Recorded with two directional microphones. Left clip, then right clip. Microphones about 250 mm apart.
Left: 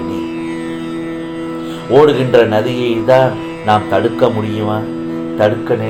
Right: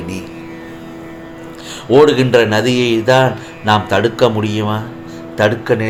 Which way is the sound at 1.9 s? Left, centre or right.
Right.